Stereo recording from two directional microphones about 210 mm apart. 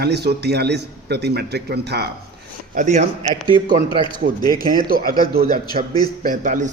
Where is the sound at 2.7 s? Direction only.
35° right (ahead or behind).